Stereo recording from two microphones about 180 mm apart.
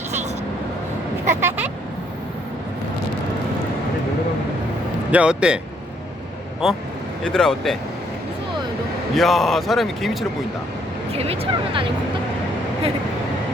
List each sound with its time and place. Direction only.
1.4 s vehicle: 10° right (ahead or behind)
5.1 s speech: 5° right (ahead or behind)
6.6 s speech: centre (ahead or behind)
9.1 s speech: centre (ahead or behind)
11.1 s speech: 35° right (ahead or behind)